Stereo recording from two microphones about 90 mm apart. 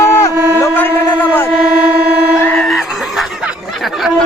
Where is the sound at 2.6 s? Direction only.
Centre (ahead or behind).